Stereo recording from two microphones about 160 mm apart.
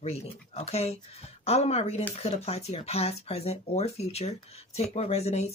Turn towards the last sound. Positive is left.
turn(degrees=40)  # may be behind; listen again after turning